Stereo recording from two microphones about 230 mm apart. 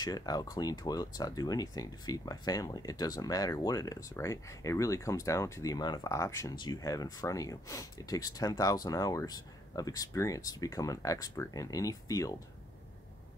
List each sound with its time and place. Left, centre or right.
0.0 s speech: centre